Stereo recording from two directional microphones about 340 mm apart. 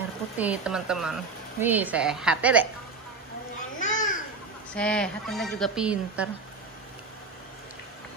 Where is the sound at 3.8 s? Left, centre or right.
Left.